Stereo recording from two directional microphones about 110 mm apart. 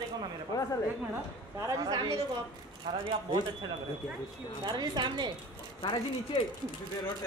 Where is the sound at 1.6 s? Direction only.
40° right (ahead or behind).